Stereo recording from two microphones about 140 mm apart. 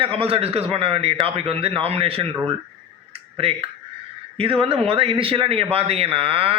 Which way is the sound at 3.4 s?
40° right (ahead or behind).